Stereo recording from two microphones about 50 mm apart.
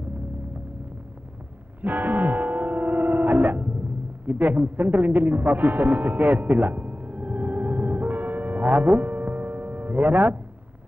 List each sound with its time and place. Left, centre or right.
1.8 s music: right